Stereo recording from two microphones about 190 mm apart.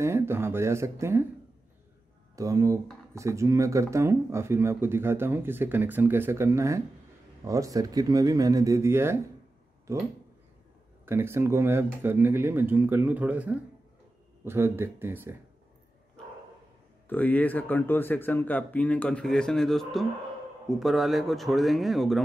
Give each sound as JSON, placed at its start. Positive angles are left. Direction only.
{"t": 0.0, "sound": "speech", "side_deg": -15}
{"t": 2.3, "sound": "speech", "side_deg": -15}
{"t": 11.1, "sound": "speech", "side_deg": -15}
{"t": 17.1, "sound": "speech", "side_deg": 10}